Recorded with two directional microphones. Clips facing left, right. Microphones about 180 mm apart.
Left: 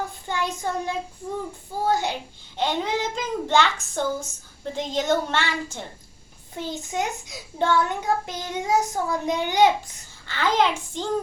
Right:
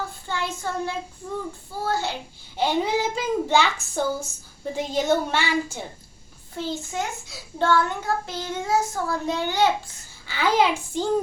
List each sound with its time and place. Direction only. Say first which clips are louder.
0.3 s child singing: left 2 dB; 15° left (ahead or behind)
1.8 s a child's voice: left 3 dB; 15° left (ahead or behind)
2.6 s a child's voice: right 2 dB; 10° right (ahead or behind)
6.6 s a child's voice: even; 15° left (ahead or behind)
10.2 s a child's voice: right 1 dB; 10° right (ahead or behind)